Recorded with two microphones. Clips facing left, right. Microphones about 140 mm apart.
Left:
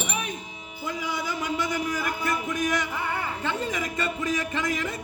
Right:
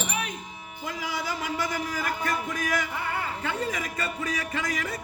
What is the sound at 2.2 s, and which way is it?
Music, 15° left (ahead or behind).